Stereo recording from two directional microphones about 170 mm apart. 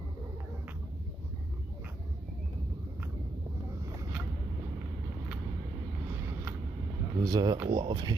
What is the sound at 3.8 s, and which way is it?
Boat, 15° right (ahead or behind).